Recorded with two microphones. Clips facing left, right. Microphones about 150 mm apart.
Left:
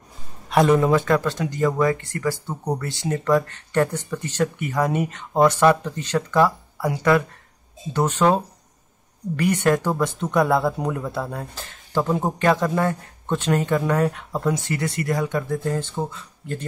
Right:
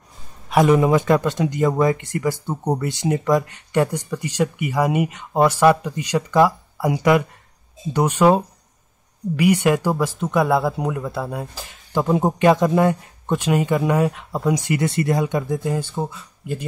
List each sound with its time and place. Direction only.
0.5 s speech: 10° right (ahead or behind)